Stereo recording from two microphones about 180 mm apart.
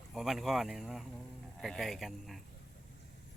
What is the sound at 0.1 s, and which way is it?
Speech, centre (ahead or behind).